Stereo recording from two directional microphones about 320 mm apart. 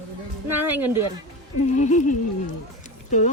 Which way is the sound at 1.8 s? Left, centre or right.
Left.